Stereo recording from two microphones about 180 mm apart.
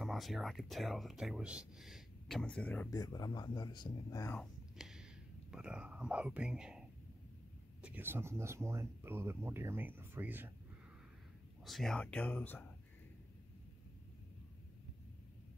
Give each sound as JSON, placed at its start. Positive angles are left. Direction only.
{"t": 0.0, "sound": "speech", "side_deg": 0}
{"t": 2.9, "sound": "speech", "side_deg": 20}
{"t": 4.3, "sound": "a sound", "side_deg": 0}
{"t": 5.5, "sound": "speech", "side_deg": -5}
{"t": 7.8, "sound": "speech", "side_deg": -10}
{"t": 11.6, "sound": "speech", "side_deg": 0}